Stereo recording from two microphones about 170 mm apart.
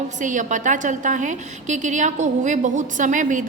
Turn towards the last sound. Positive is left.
turn(degrees=-50)  # may be behind; listen again after turning